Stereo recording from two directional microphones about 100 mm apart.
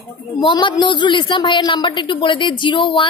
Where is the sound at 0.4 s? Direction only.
50° left (ahead or behind).